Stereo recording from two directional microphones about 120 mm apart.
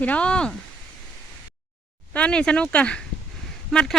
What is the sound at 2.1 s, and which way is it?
Speech, 10° left (ahead or behind).